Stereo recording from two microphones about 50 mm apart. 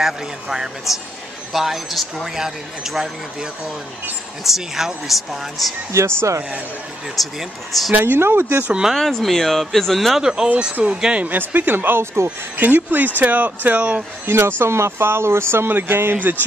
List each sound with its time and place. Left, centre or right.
0.0 s speech: centre
4.5 s speech: centre
5.9 s speech: right
7.2 s speech: centre
7.9 s speech: right
8.9 s speech: centre
10.2 s speech: centre
11.3 s speech: right
12.5 s speech: right
14.6 s speech: right